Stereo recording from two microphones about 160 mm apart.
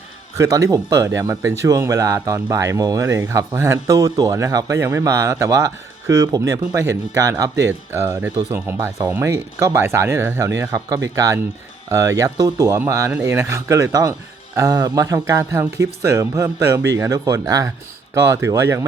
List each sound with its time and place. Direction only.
0.3 s speech: 20° right (ahead or behind)